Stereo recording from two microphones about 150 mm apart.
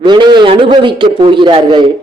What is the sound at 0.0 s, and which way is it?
A man's voice, 30° right (ahead or behind).